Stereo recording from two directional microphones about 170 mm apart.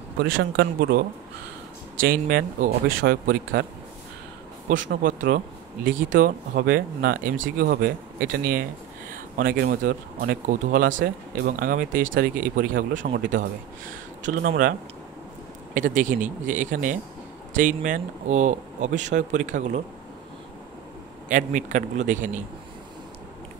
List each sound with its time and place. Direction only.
0.2 s speech: 80° right; by 3.6 s 60° right (ahead or behind)
5.0 s speech: 55° right (ahead or behind)
21.3 s speech: 50° right (ahead or behind)